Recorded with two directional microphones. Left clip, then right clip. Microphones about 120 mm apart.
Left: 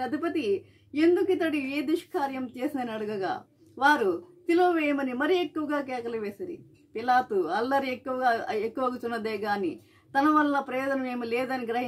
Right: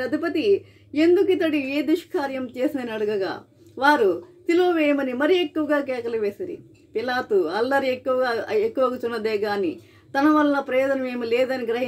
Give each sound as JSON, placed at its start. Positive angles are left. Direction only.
{"t": 0.0, "sound": "speech", "side_deg": 20}